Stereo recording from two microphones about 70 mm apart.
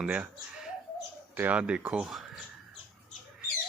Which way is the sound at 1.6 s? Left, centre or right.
Centre.